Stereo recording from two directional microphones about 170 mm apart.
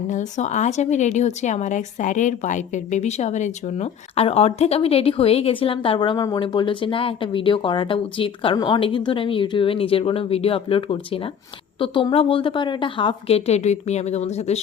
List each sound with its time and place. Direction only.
0.1 s a woman's voice: 45° left (ahead or behind)